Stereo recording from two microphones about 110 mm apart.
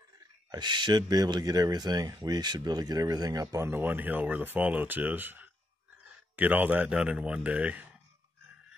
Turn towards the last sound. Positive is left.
turn(degrees=-15)  # may be behind; listen again after turning